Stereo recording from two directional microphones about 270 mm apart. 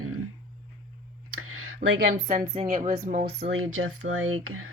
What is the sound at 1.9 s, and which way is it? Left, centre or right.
A woman's voice, right.